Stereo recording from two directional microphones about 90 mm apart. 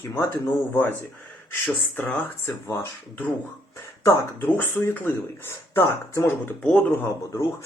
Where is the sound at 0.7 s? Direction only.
25° left (ahead or behind).